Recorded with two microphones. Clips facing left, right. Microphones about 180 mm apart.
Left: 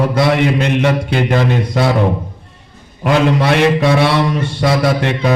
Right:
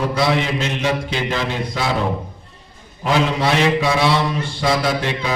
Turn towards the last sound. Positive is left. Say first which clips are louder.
# left 6 dB
turn(degrees=60)  # may be behind; listen again after turning